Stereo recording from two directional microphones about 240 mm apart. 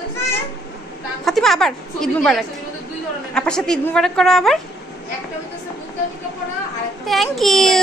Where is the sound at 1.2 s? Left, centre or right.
Centre.